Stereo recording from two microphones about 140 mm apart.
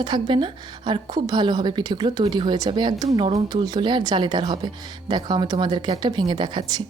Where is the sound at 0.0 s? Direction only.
35° right (ahead or behind).